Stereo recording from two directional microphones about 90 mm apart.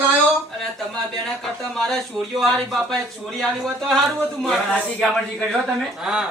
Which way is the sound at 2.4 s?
5° left (ahead or behind).